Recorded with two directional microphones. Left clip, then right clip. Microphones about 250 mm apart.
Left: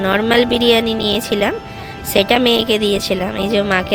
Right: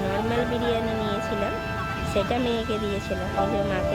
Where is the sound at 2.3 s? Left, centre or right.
Left.